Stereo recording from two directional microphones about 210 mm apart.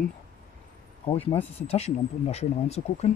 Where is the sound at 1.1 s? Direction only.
25° left (ahead or behind).